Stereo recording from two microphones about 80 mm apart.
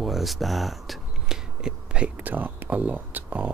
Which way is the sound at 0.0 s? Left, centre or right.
Centre.